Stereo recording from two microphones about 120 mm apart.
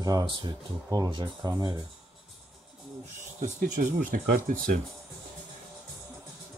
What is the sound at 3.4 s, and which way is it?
Speech, 85° right.